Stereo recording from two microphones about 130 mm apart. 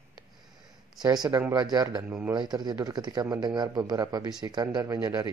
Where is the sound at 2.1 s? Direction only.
15° right (ahead or behind).